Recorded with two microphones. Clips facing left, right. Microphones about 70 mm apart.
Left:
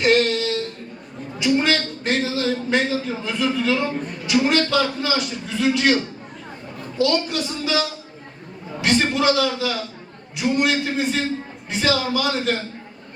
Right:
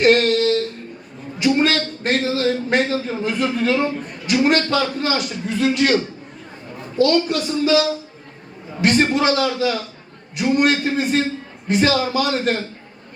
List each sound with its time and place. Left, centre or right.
0.0 s a man's voice: right
1.4 s a man's voice: right
7.0 s a man's voice: right
8.8 s a man's voice: right